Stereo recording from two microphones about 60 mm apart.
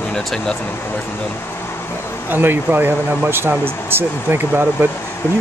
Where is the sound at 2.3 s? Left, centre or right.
Right.